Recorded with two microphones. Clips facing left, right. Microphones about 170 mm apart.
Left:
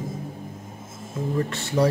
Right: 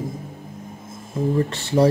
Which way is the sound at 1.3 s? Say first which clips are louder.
Right 3 dB; 30° right (ahead or behind).